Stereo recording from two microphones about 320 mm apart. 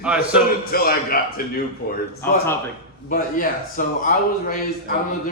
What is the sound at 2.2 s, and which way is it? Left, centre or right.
Speech, centre.